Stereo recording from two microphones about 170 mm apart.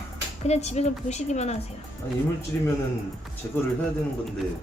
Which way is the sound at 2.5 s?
10° left (ahead or behind).